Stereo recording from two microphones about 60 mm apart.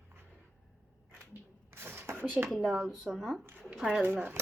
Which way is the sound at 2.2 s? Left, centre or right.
Right.